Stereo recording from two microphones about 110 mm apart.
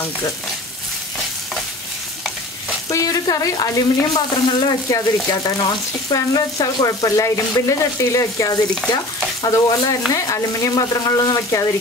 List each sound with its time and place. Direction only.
2.9 s speech: 30° left (ahead or behind)